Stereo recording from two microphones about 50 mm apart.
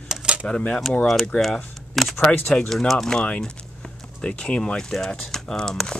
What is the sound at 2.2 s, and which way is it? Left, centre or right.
Speech, centre.